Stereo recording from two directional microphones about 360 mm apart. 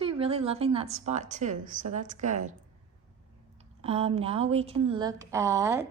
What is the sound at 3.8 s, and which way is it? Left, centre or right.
A woman's voice, centre.